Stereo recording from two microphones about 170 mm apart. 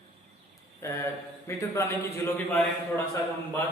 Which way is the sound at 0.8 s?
15° left (ahead or behind).